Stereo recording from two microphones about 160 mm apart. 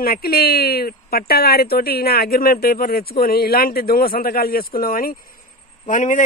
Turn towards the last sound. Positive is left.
turn(degrees=50)  # may be behind; listen again after turning